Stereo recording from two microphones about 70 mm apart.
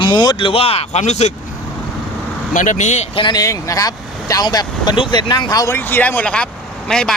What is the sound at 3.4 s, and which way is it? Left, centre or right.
Speech, left.